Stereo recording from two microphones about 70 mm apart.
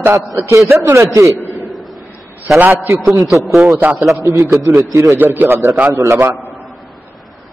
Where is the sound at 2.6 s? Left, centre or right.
Right.